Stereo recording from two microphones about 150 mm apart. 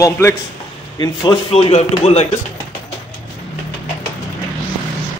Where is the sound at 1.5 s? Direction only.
45° left (ahead or behind).